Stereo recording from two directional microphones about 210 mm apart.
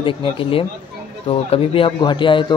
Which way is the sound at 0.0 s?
25° left (ahead or behind).